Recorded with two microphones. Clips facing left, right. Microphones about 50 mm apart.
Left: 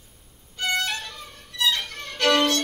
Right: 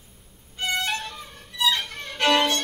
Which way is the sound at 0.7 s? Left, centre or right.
Centre.